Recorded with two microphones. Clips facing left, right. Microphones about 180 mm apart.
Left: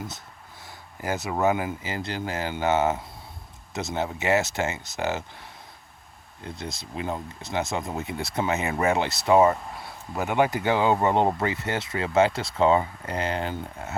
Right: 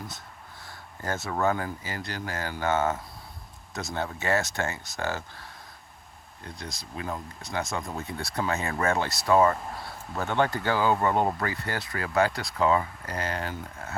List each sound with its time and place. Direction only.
1.1 s speech: 20° left (ahead or behind)
6.9 s speech: 25° left (ahead or behind)